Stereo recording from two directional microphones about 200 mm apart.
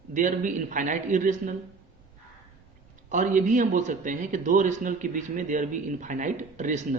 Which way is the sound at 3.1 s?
40° right (ahead or behind).